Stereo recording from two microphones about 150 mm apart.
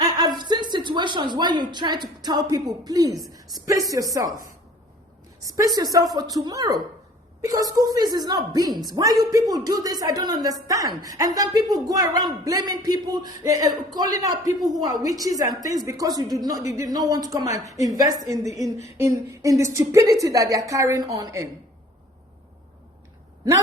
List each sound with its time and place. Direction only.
0.3 s a woman's voice: 30° right (ahead or behind)
5.5 s a woman's voice: 25° right (ahead or behind)